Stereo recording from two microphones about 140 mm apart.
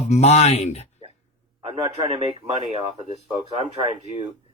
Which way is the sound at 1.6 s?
45° right (ahead or behind).